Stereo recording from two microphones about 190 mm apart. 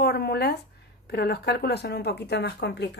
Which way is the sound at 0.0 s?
60° left (ahead or behind).